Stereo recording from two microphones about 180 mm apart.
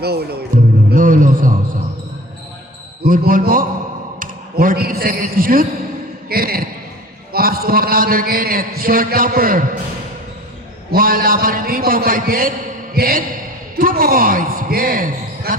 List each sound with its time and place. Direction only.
0.0 s a man's voice: 60° right (ahead or behind)
3.0 s a man's voice: 50° right (ahead or behind)
6.2 s a sound: 55° right (ahead or behind)
7.3 s a man's voice: 55° right (ahead or behind)
10.9 s a man's voice: 55° right (ahead or behind)